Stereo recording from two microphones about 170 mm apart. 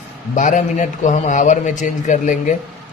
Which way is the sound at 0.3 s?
50° left (ahead or behind).